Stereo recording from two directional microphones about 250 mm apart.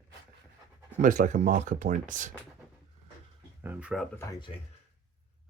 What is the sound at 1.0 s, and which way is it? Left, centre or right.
Speech, right.